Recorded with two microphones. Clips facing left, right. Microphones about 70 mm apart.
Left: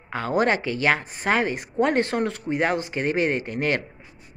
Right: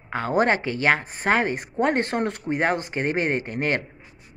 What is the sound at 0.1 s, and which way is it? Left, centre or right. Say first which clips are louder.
Speech: right 1 dB; right.